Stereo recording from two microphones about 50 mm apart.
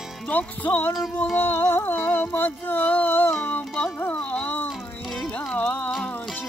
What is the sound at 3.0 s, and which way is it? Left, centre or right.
Music, left.